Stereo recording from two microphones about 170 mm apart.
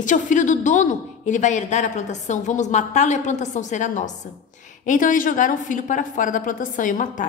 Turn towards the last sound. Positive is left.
turn(degrees=50)  # may be behind; listen again after turning